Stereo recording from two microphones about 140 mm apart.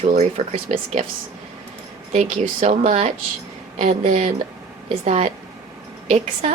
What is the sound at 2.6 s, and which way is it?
A woman's voice, 50° right (ahead or behind).